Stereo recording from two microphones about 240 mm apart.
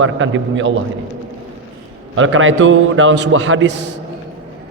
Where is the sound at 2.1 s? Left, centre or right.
Right.